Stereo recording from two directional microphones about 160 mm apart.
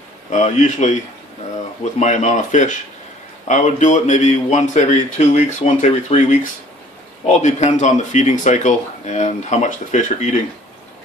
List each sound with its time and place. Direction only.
0.3 s speech: 50° left (ahead or behind)
2.0 s speech: 50° left (ahead or behind)